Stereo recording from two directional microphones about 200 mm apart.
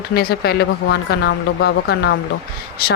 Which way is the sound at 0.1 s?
50° left (ahead or behind).